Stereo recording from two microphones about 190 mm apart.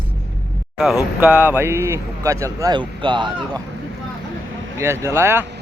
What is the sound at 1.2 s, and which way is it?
Speech, 10° right (ahead or behind).